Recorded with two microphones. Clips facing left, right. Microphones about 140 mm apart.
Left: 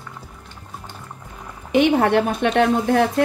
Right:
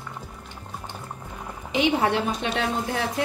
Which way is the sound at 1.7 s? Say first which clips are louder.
Left 6 dB; 55° left (ahead or behind).